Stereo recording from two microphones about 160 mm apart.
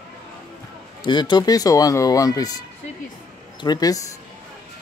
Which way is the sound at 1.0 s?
30° left (ahead or behind).